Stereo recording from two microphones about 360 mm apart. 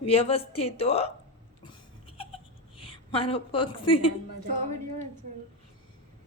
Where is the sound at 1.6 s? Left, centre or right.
Centre.